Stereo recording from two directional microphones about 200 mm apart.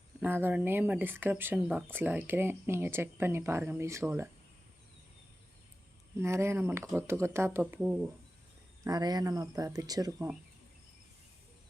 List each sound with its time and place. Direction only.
0.2 s speech: 10° right (ahead or behind)
6.1 s speech: 15° right (ahead or behind)
8.8 s speech: 20° right (ahead or behind)